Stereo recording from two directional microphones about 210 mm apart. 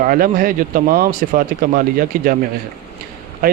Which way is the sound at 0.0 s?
40° right (ahead or behind).